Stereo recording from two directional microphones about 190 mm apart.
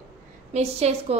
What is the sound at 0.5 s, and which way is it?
Speech, 35° right (ahead or behind).